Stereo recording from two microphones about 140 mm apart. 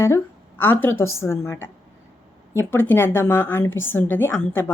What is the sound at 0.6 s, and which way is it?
A woman's voice, 15° left (ahead or behind).